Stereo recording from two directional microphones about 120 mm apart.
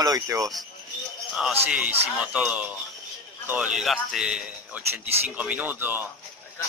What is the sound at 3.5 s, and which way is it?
Speech, 10° right (ahead or behind).